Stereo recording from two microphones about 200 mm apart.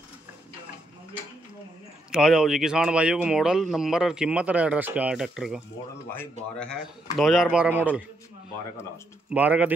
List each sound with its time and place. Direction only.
2.1 s speech: centre (ahead or behind)
7.2 s speech: centre (ahead or behind)
9.3 s speech: 5° right (ahead or behind)